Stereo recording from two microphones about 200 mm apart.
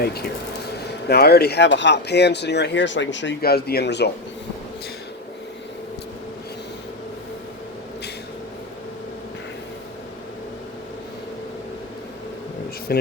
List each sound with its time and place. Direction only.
0.0 s speech: 50° left (ahead or behind)
12.9 s speech: 50° left (ahead or behind)